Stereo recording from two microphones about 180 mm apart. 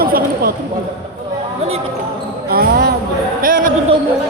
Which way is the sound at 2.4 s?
60° right (ahead or behind).